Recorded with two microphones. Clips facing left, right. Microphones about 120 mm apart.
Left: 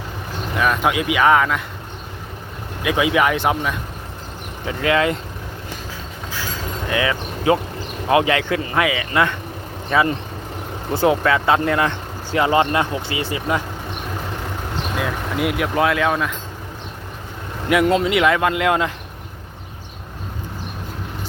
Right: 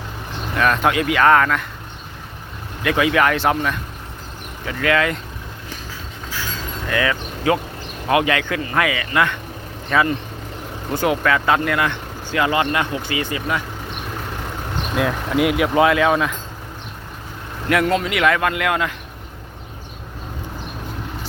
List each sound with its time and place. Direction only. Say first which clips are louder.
0.5 s speech: right 1 dB; 10° left (ahead or behind)
2.8 s speech: even; 15° left (ahead or behind)
4.6 s speech: left 1 dB; 25° left (ahead or behind)
6.9 s speech: even; 25° left (ahead or behind)
15.4 s speech: right 4 dB; 5° right (ahead or behind)
17.7 s speech: left 2 dB; 15° left (ahead or behind)